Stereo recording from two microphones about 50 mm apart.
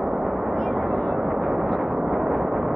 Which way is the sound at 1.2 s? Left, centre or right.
Centre.